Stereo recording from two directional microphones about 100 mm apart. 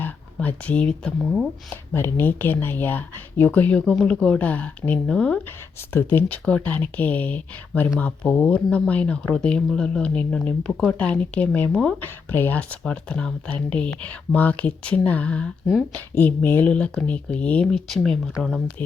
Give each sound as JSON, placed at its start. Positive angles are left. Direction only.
{"t": 0.3, "sound": "speech", "side_deg": 15}
{"t": 1.7, "sound": "speech", "side_deg": 20}